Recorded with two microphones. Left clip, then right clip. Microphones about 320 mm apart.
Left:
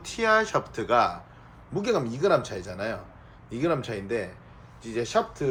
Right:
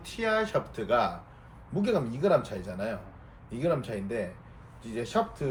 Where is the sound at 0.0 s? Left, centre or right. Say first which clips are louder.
Left 6 dB; left.